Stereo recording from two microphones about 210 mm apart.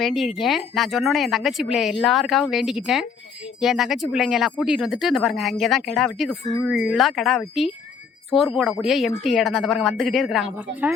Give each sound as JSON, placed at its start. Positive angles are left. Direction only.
{"t": 0.0, "sound": "speech", "side_deg": 0}